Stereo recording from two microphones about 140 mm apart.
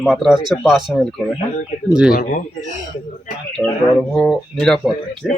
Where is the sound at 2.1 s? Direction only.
65° left (ahead or behind).